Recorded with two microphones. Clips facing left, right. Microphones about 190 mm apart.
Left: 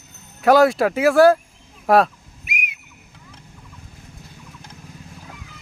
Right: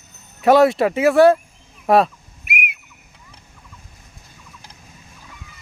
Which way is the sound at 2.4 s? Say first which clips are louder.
Right 4 dB; 60° right (ahead or behind).